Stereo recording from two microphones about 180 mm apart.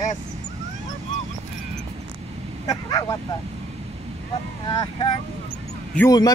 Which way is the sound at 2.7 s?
20° left (ahead or behind).